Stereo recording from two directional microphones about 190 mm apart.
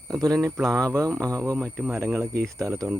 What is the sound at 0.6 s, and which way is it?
Speech, centre (ahead or behind).